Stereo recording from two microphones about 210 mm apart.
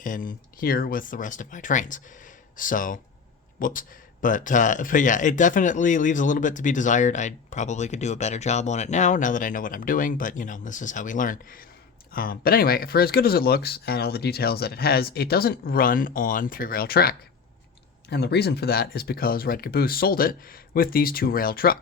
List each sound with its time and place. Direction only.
0.0 s speech: 40° left (ahead or behind)